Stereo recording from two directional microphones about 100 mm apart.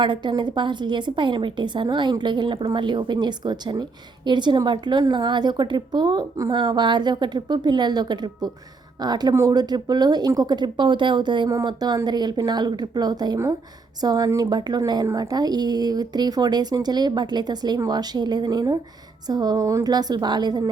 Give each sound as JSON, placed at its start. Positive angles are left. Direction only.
{"t": 0.0, "sound": "a woman's voice", "side_deg": -50}
{"t": 11.4, "sound": "a woman's voice", "side_deg": -40}